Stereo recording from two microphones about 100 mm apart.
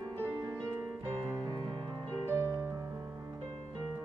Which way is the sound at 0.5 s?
25° right (ahead or behind).